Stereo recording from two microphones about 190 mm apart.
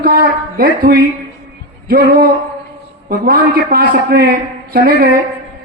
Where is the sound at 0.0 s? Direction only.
50° right (ahead or behind).